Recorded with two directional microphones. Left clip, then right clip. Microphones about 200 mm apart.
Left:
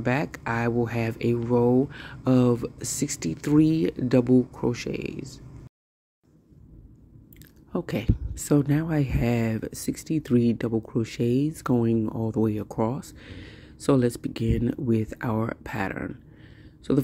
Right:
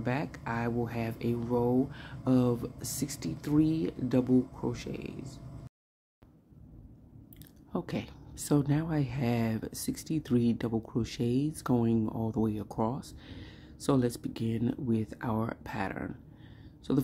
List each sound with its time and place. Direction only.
0.0 s speech: 25° left (ahead or behind)
7.7 s speech: 15° left (ahead or behind)